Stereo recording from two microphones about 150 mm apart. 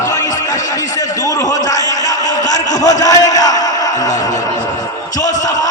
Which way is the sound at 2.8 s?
25° left (ahead or behind).